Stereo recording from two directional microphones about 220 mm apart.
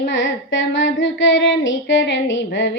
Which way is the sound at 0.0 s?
55° left (ahead or behind).